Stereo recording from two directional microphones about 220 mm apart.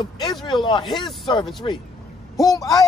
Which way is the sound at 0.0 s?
20° left (ahead or behind).